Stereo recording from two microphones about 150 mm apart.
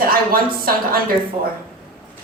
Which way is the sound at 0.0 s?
75° right (ahead or behind).